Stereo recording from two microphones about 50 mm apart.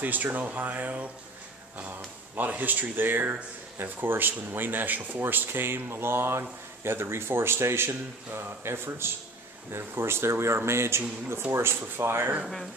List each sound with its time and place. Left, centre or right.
0.0 s speech: right
2.3 s speech: right